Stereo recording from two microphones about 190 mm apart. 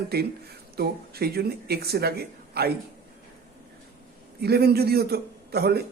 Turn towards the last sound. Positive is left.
turn(degrees=-55)  # may be behind; listen again after turning